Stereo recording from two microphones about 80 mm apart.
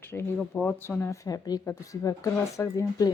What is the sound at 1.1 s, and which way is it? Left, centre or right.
A woman's voice, left.